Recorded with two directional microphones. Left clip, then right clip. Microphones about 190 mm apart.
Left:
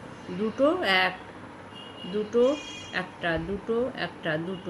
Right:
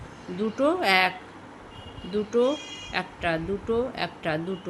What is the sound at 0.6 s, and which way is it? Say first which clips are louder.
Speech: right 1 dB; 55° right (ahead or behind).